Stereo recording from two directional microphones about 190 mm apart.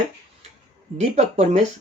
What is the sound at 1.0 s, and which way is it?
Speech, 35° right (ahead or behind).